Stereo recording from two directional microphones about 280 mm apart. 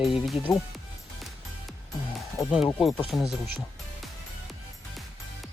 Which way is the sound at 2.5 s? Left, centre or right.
Centre.